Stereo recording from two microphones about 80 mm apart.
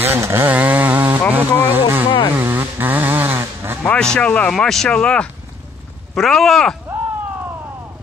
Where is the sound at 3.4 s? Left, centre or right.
Right.